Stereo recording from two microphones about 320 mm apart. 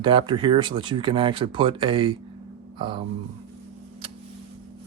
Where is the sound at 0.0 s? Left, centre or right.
Centre.